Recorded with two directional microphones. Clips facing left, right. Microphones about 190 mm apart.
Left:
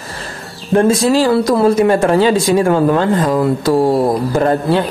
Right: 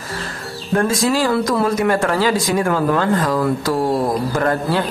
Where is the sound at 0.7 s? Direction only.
25° left (ahead or behind).